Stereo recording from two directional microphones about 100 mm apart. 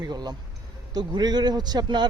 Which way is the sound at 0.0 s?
45° right (ahead or behind).